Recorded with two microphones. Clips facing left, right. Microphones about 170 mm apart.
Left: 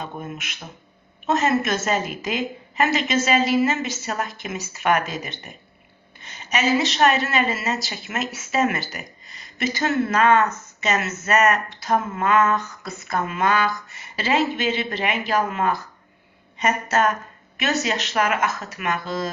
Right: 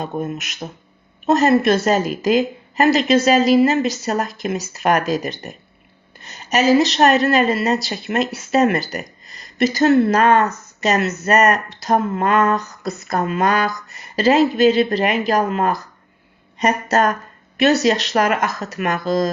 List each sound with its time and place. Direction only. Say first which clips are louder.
0.0 s a woman's voice: right 8 dB; 40° right (ahead or behind)